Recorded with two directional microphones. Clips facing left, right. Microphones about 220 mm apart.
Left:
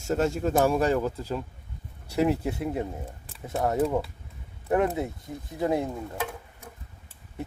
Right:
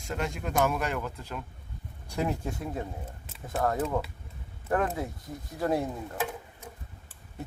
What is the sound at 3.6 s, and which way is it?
Speech, 20° left (ahead or behind).